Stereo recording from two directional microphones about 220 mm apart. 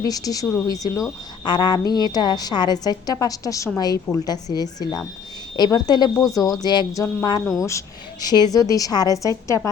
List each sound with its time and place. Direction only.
0.0 s a woman's voice: 15° left (ahead or behind)
7.4 s speech: centre (ahead or behind)
7.7 s a woman's voice: 15° left (ahead or behind)